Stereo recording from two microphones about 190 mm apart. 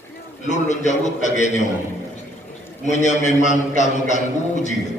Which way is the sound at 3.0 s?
40° left (ahead or behind).